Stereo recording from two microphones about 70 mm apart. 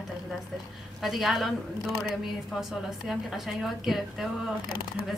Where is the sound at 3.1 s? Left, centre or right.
Centre.